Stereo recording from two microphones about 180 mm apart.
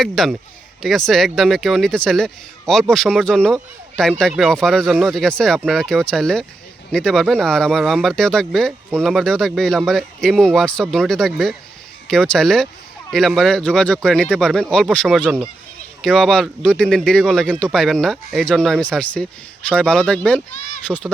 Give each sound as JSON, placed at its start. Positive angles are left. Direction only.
{"t": 0.0, "sound": "a man's voice", "side_deg": 0}
{"t": 20.6, "sound": "a sound", "side_deg": 45}
{"t": 20.8, "sound": "speech", "side_deg": 5}